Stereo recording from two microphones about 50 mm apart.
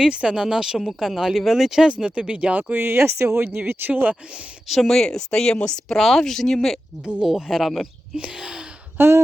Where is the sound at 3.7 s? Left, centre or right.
Right.